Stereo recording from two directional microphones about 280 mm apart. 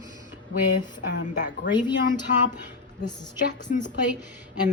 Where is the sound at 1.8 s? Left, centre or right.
Centre.